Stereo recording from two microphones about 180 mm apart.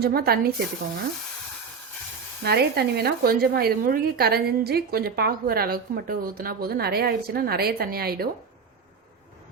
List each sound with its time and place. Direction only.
0.0 s a woman's voice: 60° right (ahead or behind)
2.4 s a woman's voice: 60° right (ahead or behind)